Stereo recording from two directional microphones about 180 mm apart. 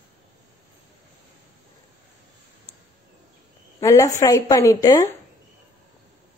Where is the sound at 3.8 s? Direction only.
15° left (ahead or behind).